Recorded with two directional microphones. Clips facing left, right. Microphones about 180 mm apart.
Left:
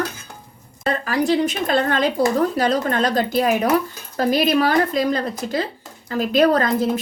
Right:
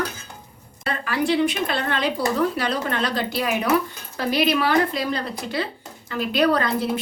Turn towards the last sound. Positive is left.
turn(degrees=45)  # may be behind; listen again after turning